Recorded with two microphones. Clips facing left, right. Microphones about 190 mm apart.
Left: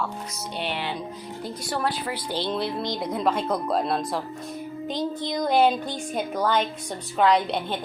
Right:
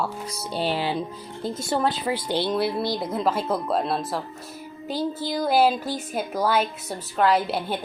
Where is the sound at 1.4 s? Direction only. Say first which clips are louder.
Right 4 dB; 25° right (ahead or behind).